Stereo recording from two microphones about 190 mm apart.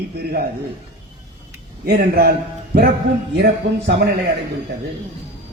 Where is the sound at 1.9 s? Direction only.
55° right (ahead or behind).